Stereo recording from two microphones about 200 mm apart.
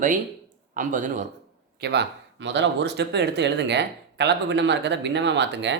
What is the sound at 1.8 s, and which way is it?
Speech, 55° right (ahead or behind).